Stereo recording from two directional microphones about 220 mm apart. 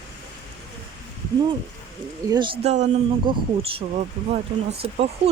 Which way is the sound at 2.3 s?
20° right (ahead or behind).